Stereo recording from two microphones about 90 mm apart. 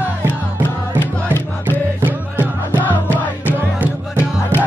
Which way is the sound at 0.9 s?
25° left (ahead or behind).